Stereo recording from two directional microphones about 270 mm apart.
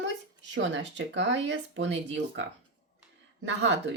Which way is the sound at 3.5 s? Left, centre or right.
Right.